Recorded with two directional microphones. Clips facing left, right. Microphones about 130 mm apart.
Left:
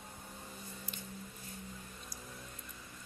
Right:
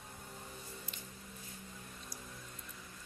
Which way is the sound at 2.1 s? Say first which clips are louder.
Even; 20° left (ahead or behind).